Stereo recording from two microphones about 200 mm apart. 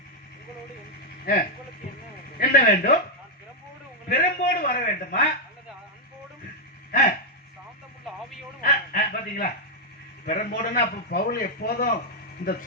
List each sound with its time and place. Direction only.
1.2 s speech: 50° left (ahead or behind)
4.1 s a man's voice: 45° left (ahead or behind)
8.6 s a sound: 50° left (ahead or behind)
10.2 s a man's voice: 45° left (ahead or behind)